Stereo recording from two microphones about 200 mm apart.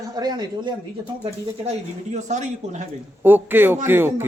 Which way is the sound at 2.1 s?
35° right (ahead or behind).